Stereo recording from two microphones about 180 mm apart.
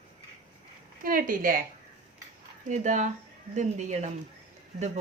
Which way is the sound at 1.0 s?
50° right (ahead or behind).